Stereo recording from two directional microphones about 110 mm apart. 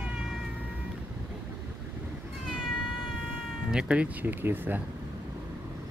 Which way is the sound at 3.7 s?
10° right (ahead or behind).